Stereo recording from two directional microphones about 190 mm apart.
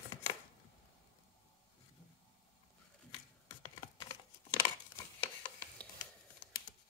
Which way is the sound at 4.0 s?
20° left (ahead or behind).